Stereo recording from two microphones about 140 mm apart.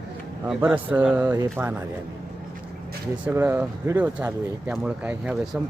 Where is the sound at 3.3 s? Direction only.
15° right (ahead or behind).